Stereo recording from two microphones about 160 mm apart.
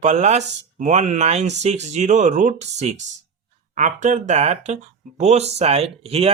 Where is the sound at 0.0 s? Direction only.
45° right (ahead or behind).